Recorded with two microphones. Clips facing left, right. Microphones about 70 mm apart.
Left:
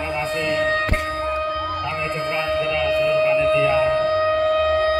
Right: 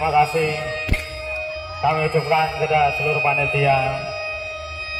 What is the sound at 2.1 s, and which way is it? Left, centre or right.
A man's voice, left.